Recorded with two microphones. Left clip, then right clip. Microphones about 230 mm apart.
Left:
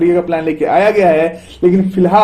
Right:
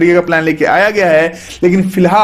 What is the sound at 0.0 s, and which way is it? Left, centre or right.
Speech, right.